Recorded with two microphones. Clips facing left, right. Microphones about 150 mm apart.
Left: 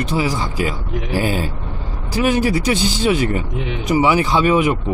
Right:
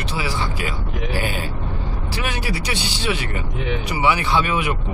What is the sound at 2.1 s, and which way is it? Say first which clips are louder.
Speech: left 11 dB; 45° left (ahead or behind).